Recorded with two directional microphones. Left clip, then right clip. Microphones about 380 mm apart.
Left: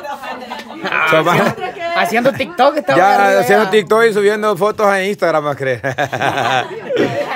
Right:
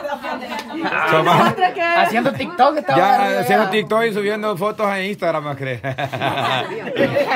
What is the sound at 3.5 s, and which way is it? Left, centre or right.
Speech, centre.